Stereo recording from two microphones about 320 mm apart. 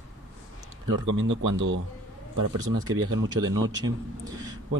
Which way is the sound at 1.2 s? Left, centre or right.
Right.